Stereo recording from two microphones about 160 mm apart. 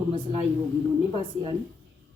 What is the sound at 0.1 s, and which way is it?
A woman's voice, 35° right (ahead or behind).